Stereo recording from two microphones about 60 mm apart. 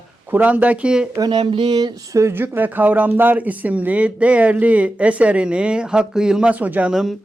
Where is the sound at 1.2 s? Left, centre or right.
Right.